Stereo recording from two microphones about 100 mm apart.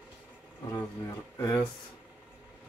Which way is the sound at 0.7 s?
30° left (ahead or behind).